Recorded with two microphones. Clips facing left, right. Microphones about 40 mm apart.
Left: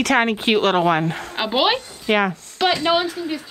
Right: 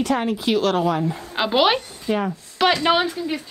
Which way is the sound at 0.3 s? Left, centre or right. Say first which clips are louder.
Left 2 dB; left.